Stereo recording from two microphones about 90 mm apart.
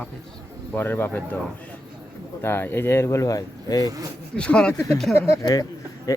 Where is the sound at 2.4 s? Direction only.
25° left (ahead or behind); by 3.9 s 40° left (ahead or behind).